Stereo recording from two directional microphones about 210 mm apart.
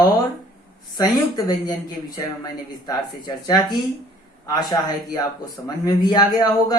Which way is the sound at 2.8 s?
20° left (ahead or behind).